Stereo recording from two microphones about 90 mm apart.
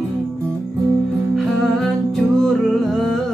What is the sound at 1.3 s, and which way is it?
Music, centre (ahead or behind).